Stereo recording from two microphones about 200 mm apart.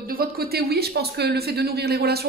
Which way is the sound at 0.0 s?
50° right (ahead or behind).